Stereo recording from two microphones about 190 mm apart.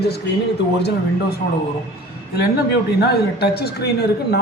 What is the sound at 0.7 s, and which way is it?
Speech, 60° left (ahead or behind).